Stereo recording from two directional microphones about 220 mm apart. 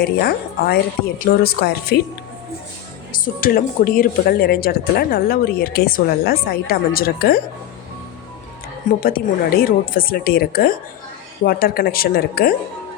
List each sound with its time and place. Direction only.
0.0 s speech: 45° left (ahead or behind)
3.1 s speech: 40° left (ahead or behind)
9.0 s speech: 40° left (ahead or behind)